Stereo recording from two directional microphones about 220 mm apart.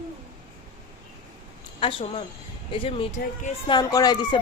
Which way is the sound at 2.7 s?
25° left (ahead or behind).